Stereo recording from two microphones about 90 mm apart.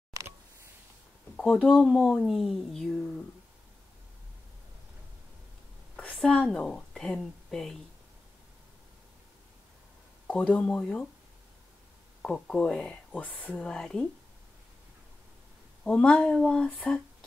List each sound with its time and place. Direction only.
0.1 s a sound: 35° right (ahead or behind)
1.3 s a sound: 10° left (ahead or behind)
1.6 s speech: centre (ahead or behind)
5.9 s a woman's voice: 10° left (ahead or behind)
10.2 s speech: 15° left (ahead or behind)
12.2 s speech: 10° left (ahead or behind)
15.8 s speech: 10° left (ahead or behind)